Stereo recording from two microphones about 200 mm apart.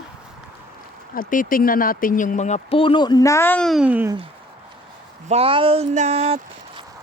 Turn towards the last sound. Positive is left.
turn(degrees=-35)  # may be behind; listen again after turning